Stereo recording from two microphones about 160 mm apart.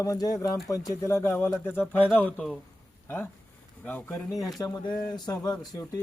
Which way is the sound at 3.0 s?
10° left (ahead or behind).